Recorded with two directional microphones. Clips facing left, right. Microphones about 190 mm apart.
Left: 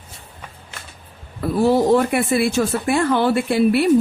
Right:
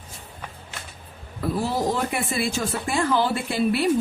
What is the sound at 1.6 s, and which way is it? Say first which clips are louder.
Speech: left 12 dB; 60° left (ahead or behind).